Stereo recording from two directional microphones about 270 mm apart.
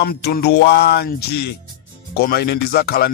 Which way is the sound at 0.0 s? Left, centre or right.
Left.